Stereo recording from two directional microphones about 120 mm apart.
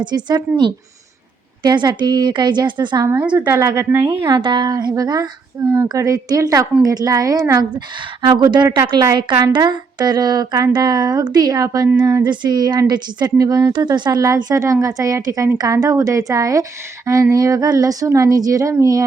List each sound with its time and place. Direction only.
0.0 s a woman's voice: 35° right (ahead or behind)
3.1 s speech: 15° right (ahead or behind)
4.4 s a woman's voice: 40° right (ahead or behind)
8.2 s a woman's voice: 40° right (ahead or behind)